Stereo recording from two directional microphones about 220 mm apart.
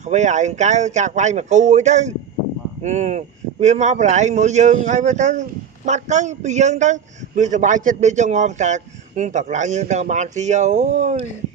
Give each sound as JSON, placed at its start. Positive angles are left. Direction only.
{"t": 0.0, "sound": "speech", "side_deg": -30}